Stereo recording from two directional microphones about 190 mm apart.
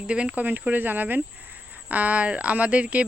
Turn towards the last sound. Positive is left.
turn(degrees=-5)  # may be behind; listen again after turning